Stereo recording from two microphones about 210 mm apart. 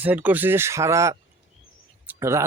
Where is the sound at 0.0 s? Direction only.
10° right (ahead or behind).